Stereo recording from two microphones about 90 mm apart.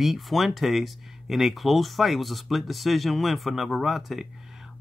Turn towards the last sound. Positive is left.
turn(degrees=0)  # may be behind; listen again after turning